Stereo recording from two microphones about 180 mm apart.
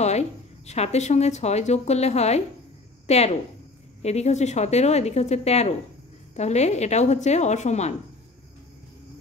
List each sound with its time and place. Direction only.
0.7 s a woman's voice: 40° left (ahead or behind)